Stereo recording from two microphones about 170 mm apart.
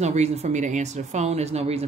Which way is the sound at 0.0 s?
40° right (ahead or behind).